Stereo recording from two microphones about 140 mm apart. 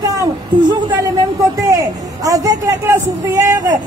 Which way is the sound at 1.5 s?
25° right (ahead or behind).